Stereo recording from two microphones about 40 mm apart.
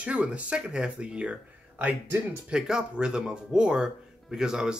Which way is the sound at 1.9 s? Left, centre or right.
Right.